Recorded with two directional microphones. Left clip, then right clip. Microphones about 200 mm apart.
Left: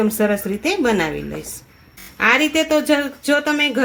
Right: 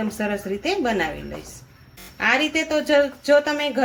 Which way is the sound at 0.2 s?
55° left (ahead or behind).